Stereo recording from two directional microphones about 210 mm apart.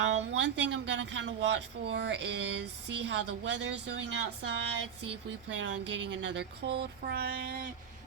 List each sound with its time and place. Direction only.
0.3 s speech: 55° right (ahead or behind)